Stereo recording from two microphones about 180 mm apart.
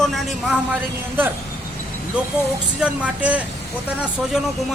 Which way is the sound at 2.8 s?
5° right (ahead or behind).